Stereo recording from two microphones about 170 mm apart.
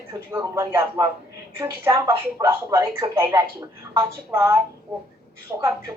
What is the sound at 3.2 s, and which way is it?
Speech, 25° right (ahead or behind).